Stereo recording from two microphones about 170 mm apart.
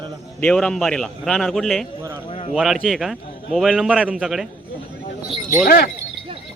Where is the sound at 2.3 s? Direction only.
35° left (ahead or behind).